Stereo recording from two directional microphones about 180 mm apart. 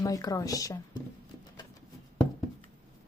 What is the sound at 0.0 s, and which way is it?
Speech, 20° left (ahead or behind).